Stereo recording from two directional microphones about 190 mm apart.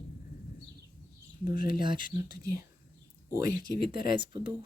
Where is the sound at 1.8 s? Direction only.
25° right (ahead or behind).